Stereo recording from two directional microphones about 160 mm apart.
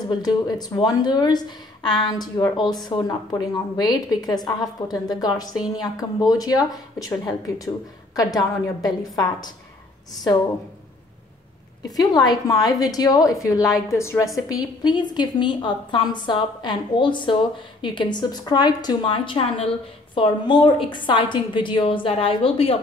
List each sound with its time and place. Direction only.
0.1 s a woman's voice: 25° left (ahead or behind)
11.8 s a woman's voice: 25° left (ahead or behind)